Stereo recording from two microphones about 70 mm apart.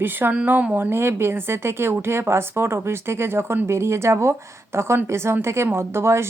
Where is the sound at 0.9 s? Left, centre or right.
Right.